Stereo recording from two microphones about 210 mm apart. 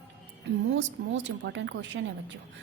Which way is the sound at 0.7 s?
60° right (ahead or behind).